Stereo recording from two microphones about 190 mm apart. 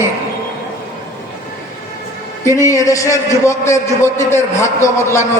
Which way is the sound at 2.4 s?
15° left (ahead or behind).